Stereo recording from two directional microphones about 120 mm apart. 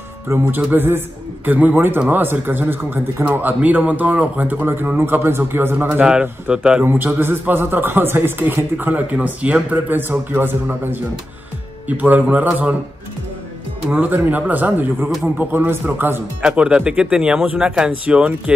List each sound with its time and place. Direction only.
0.3 s a man's voice: 15° right (ahead or behind)
12.0 s a man's voice: 15° right (ahead or behind)
13.8 s a man's voice: 10° right (ahead or behind)
16.4 s a man's voice: 10° right (ahead or behind)